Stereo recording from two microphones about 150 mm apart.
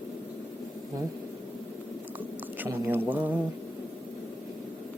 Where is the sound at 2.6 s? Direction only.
15° right (ahead or behind).